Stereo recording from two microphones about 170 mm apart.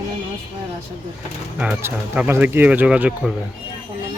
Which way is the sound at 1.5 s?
10° right (ahead or behind).